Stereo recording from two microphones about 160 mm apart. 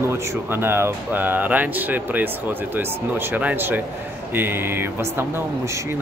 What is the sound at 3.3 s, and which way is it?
A man's voice, 10° right (ahead or behind).